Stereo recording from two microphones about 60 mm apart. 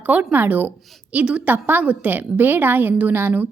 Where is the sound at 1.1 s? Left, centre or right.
Right.